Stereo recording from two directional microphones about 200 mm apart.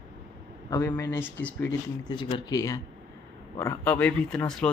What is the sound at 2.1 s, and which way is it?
Speech, 25° left (ahead or behind).